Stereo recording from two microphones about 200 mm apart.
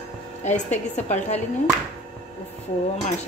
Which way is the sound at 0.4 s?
35° left (ahead or behind).